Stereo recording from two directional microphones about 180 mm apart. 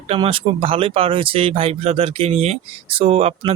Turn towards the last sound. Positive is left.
turn(degrees=-35)  # may be behind; listen again after turning